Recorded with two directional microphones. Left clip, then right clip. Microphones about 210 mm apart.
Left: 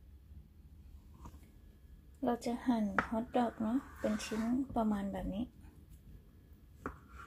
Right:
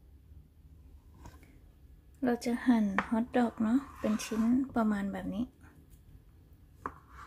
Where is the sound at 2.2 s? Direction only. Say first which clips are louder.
Right 5 dB; 15° right (ahead or behind).